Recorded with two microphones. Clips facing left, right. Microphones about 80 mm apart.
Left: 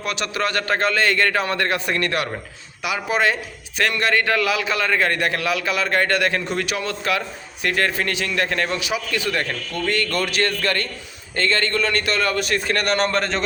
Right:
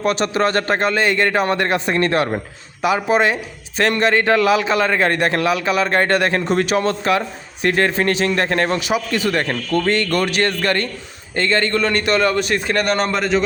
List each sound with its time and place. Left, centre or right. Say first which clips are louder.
0.0 s a man's voice: right 7 dB; right
13.1 s speech: right 4 dB; centre